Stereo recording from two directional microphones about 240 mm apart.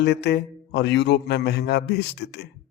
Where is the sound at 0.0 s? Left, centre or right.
Left.